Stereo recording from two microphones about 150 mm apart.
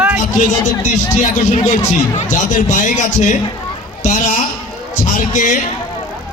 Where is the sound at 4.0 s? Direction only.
55° left (ahead or behind).